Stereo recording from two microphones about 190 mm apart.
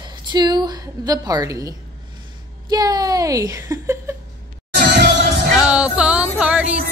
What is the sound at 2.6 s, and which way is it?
A woman's voice, 20° right (ahead or behind).